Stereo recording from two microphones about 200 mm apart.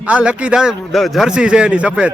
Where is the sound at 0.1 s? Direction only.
5° right (ahead or behind).